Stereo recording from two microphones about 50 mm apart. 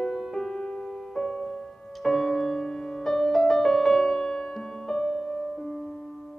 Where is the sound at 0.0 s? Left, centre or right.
Centre.